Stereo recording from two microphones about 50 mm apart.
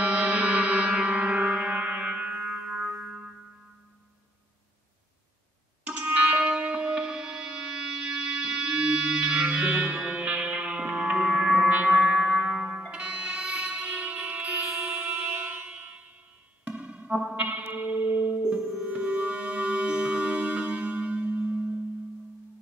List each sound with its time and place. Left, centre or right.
0.0 s music: right
2.4 s music: centre
2.8 s music: right
3.1 s music: centre
5.9 s music: right
9.4 s music: right
14.7 s music: centre
15.2 s music: right
15.5 s music: right
18.4 s music: centre
18.8 s music: right